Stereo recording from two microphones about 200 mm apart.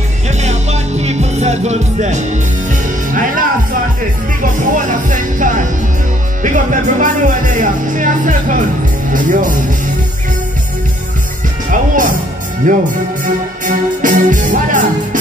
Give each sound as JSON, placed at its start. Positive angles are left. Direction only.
{"t": 0.4, "sound": "music", "side_deg": -35}
{"t": 4.4, "sound": "speech", "side_deg": -40}
{"t": 11.7, "sound": "speech", "side_deg": -40}
{"t": 13.2, "sound": "music", "side_deg": -40}